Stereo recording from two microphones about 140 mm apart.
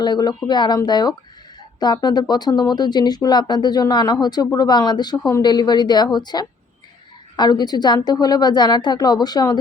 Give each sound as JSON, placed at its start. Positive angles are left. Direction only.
{"t": 0.0, "sound": "speech", "side_deg": 30}